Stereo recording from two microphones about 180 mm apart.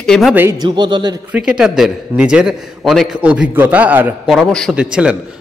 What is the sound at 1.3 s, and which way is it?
A man's voice, 5° right (ahead or behind).